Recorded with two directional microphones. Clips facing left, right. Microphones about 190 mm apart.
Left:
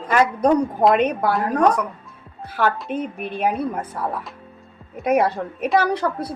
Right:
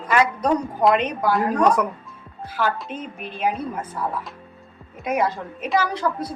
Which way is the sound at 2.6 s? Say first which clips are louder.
Left 4 dB; 55° left (ahead or behind).